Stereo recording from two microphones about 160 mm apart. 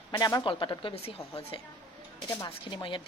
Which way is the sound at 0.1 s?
25° left (ahead or behind).